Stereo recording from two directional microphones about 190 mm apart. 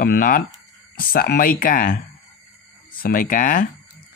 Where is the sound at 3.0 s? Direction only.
45° left (ahead or behind).